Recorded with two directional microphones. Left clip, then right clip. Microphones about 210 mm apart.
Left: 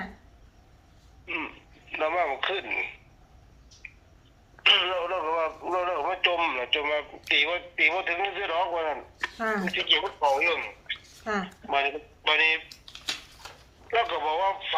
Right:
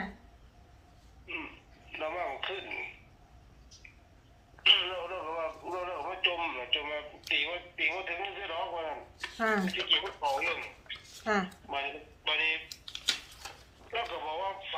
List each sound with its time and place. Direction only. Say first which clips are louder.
1.3 s a sound: left 7 dB; 50° left (ahead or behind)
1.9 s speech: left 9 dB; 50° left (ahead or behind)
3.8 s a sound: left 10 dB; 50° left (ahead or behind)
4.6 s radio: left 4 dB; 50° left (ahead or behind)
9.3 s speech: even; centre (ahead or behind)
9.6 s speech: left 5 dB; 55° left (ahead or behind)
11.2 s speech: right 1 dB; centre (ahead or behind)
11.6 s speech: left 9 dB; 50° left (ahead or behind)
12.6 s typing: right 2 dB; 5° right (ahead or behind)
13.9 s speech: left 9 dB; 50° left (ahead or behind)